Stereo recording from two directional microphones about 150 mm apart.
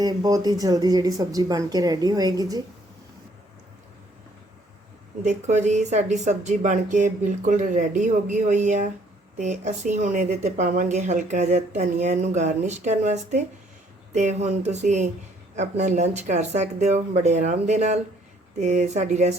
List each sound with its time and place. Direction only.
0.0 s speech: 25° right (ahead or behind)
5.2 s speech: 50° right (ahead or behind)